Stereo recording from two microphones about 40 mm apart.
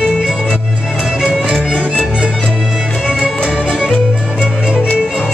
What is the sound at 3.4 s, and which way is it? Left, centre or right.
Music, right.